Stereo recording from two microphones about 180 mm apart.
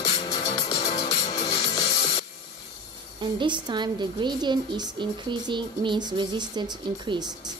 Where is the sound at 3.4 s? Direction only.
25° right (ahead or behind).